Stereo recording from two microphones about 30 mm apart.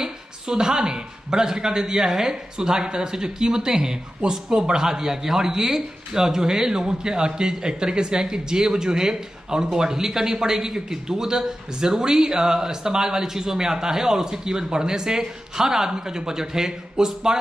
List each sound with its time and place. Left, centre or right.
0.0 s a man's voice: right